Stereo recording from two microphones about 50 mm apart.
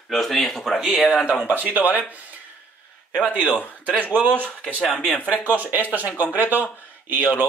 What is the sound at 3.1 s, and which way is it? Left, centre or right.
Speech, right.